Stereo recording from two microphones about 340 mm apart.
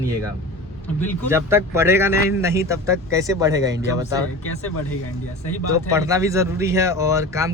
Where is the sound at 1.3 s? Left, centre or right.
Centre.